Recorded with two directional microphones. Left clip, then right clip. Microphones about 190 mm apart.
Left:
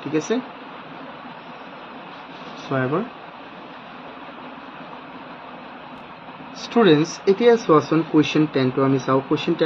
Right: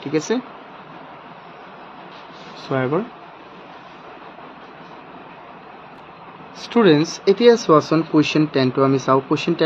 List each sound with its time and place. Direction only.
0.1 s speech: 50° right (ahead or behind)
2.7 s speech: 50° right (ahead or behind)
6.7 s speech: 45° right (ahead or behind)